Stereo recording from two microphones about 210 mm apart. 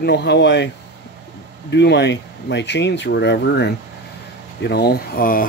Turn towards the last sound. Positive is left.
turn(degrees=40)  # may be behind; listen again after turning